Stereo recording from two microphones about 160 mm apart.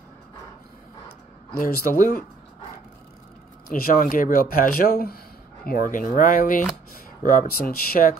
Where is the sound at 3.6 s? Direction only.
65° left (ahead or behind).